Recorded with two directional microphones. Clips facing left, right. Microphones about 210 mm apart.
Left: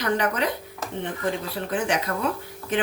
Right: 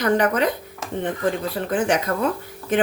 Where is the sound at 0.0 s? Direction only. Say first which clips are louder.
Right 5 dB; 50° right (ahead or behind).